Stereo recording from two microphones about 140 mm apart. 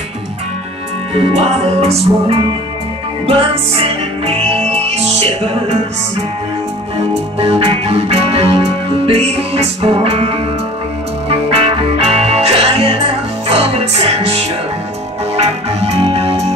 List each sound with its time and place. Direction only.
1.1 s music: 45° right (ahead or behind)
7.3 s music: 45° right (ahead or behind)